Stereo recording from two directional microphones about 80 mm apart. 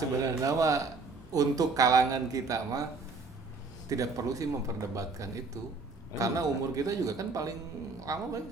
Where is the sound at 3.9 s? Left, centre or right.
Right.